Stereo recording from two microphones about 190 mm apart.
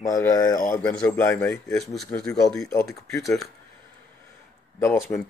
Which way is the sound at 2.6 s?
15° left (ahead or behind).